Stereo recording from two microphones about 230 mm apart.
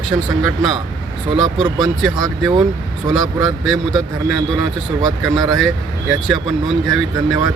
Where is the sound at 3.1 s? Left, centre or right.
Centre.